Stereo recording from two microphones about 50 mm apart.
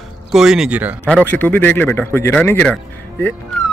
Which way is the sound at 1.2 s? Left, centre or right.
Left.